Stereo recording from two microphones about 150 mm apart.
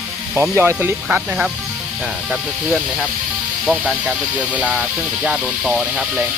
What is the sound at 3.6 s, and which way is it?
Speech, centre (ahead or behind).